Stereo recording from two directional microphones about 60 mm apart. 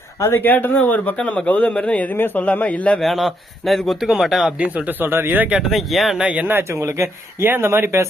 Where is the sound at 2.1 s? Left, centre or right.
Left.